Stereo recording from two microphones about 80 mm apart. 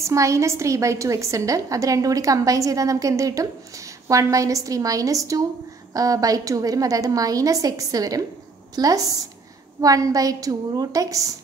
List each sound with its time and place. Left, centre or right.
0.0 s a woman's voice: right